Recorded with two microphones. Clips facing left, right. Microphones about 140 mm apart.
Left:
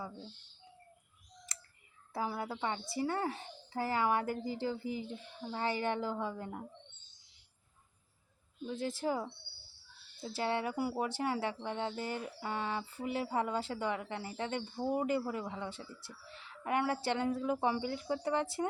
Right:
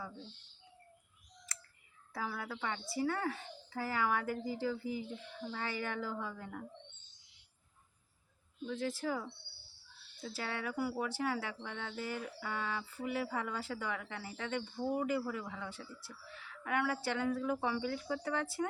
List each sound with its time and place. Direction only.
1.5 s clicking: 20° left (ahead or behind)
2.1 s speech: 30° left (ahead or behind)
8.6 s speech: 25° left (ahead or behind)